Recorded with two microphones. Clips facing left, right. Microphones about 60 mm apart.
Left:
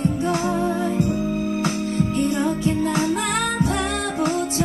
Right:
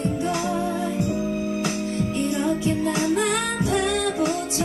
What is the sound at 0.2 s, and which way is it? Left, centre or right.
Music, left.